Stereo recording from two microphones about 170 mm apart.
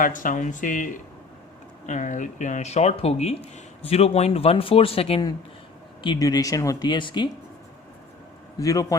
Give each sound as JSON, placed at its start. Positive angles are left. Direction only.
{"t": 0.0, "sound": "speech", "side_deg": 50}
{"t": 1.9, "sound": "speech", "side_deg": 50}
{"t": 8.5, "sound": "speech", "side_deg": 20}